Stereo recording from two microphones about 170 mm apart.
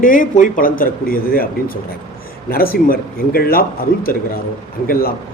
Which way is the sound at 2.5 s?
60° left (ahead or behind).